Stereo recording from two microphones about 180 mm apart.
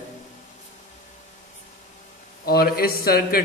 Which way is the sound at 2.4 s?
60° left (ahead or behind).